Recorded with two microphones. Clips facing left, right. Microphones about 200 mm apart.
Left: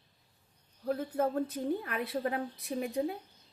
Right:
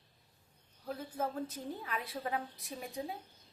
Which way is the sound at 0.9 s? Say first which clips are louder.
Left 7 dB; 60° left (ahead or behind).